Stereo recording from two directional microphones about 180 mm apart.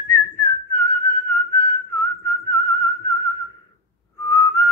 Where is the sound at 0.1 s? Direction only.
15° left (ahead or behind).